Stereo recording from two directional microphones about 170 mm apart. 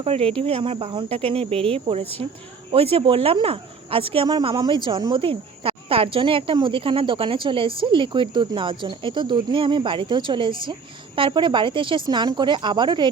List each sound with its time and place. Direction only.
0.0 s speech: 35° right (ahead or behind)